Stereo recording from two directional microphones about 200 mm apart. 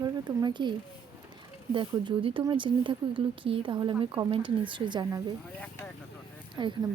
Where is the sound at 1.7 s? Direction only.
25° right (ahead or behind).